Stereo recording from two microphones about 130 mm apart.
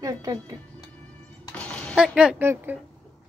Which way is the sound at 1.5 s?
10° left (ahead or behind).